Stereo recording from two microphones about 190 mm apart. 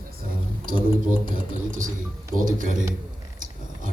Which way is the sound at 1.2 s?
45° right (ahead or behind).